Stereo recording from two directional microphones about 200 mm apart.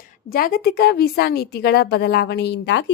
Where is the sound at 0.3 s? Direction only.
45° left (ahead or behind).